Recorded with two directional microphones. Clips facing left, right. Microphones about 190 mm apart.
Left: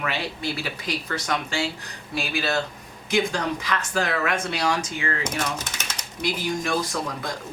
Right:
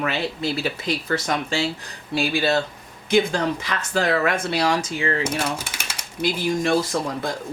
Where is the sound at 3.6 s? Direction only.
30° right (ahead or behind).